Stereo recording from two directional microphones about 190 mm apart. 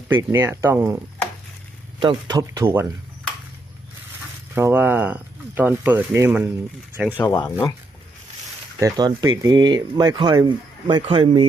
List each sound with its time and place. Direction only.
0.1 s speech: 15° right (ahead or behind)
2.0 s speech: 25° right (ahead or behind)
4.5 s speech: 10° right (ahead or behind)
7.3 s speech: 15° left (ahead or behind)
8.8 s speech: 20° right (ahead or behind)